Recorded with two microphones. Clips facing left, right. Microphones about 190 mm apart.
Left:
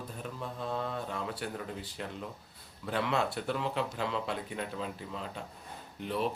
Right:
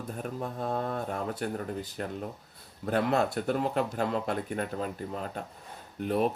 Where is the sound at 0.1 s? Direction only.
45° right (ahead or behind).